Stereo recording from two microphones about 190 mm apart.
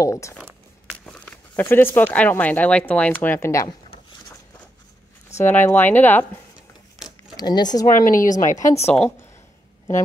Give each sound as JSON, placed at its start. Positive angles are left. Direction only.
{"t": 0.0, "sound": "speech", "side_deg": 15}
{"t": 0.4, "sound": "a sound", "side_deg": -5}
{"t": 1.0, "sound": "speech", "side_deg": 5}
{"t": 5.3, "sound": "speech", "side_deg": 10}
{"t": 7.3, "sound": "speech", "side_deg": 20}
{"t": 7.9, "sound": "speech", "side_deg": 45}